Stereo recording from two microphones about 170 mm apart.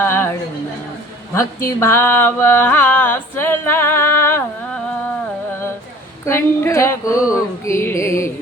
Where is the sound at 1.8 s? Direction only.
15° left (ahead or behind).